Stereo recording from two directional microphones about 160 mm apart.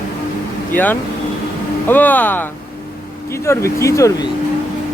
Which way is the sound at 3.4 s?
15° left (ahead or behind).